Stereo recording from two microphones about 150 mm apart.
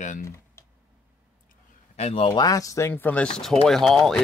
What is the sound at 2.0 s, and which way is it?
Speech, 45° left (ahead or behind).